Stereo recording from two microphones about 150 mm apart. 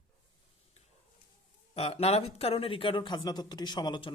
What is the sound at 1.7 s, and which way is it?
Speech, 45° left (ahead or behind).